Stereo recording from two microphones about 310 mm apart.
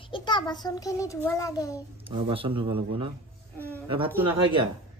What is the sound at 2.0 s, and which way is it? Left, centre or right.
A man's voice, centre.